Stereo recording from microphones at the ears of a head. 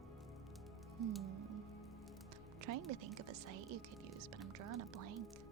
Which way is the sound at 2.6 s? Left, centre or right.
Right.